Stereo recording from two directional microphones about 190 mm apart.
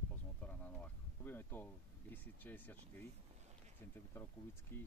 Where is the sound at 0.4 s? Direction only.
10° left (ahead or behind).